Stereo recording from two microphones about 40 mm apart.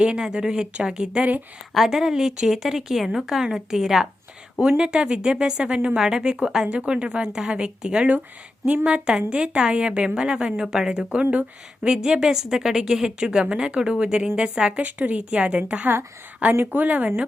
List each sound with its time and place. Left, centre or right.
0.0 s a woman's voice: centre
1.7 s a woman's voice: centre
4.8 s a woman's voice: right
6.0 s a woman's voice: centre
6.7 s a woman's voice: right
11.1 s speech: right
11.9 s a woman's voice: right
14.8 s speech: right
15.2 s a woman's voice: right
16.5 s speech: right